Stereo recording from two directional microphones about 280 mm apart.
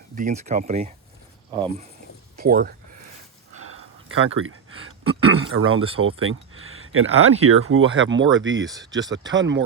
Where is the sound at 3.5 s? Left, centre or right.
Right.